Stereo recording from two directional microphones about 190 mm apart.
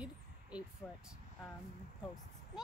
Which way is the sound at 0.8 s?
5° left (ahead or behind).